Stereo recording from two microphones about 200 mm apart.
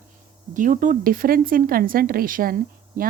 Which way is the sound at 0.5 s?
40° right (ahead or behind).